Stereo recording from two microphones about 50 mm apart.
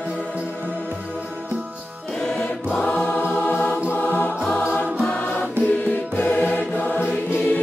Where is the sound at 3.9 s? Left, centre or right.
Left.